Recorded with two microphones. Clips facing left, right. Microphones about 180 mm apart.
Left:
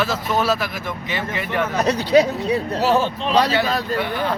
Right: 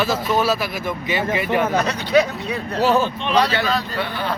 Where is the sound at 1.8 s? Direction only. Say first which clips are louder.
Left 2 dB; 35° left (ahead or behind).